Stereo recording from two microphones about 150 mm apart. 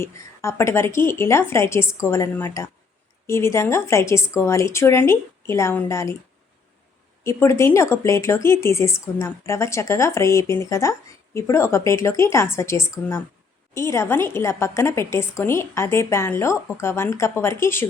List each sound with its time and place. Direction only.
0.0 s a woman's voice: 20° left (ahead or behind)
7.3 s a woman's voice: 20° left (ahead or behind)